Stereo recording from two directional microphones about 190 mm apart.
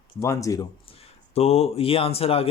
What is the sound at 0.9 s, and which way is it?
Speech, 30° left (ahead or behind).